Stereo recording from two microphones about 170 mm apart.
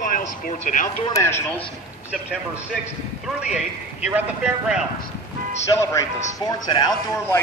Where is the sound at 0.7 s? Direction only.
45° left (ahead or behind).